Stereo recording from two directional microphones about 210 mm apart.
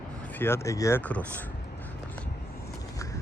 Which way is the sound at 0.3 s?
10° left (ahead or behind).